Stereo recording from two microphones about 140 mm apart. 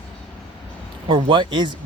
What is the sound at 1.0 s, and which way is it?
Speech, 35° right (ahead or behind).